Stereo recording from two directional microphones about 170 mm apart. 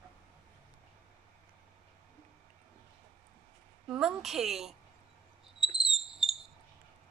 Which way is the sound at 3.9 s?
Centre (ahead or behind).